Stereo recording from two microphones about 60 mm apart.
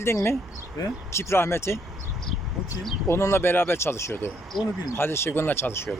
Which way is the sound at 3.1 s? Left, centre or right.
Left.